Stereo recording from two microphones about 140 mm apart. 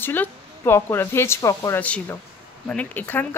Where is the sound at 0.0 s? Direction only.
15° left (ahead or behind).